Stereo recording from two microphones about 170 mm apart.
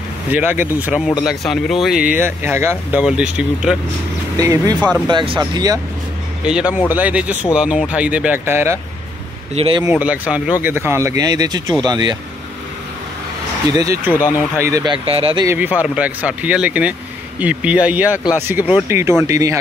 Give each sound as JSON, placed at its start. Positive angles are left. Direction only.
{"t": 0.3, "sound": "speech", "side_deg": -10}
{"t": 4.4, "sound": "speech", "side_deg": -20}
{"t": 6.4, "sound": "speech", "side_deg": -5}
{"t": 9.6, "sound": "speech", "side_deg": -30}
{"t": 9.8, "sound": "speech", "side_deg": -10}
{"t": 13.7, "sound": "speech", "side_deg": -15}
{"t": 15.0, "sound": "speech", "side_deg": -30}
{"t": 15.4, "sound": "speech", "side_deg": -10}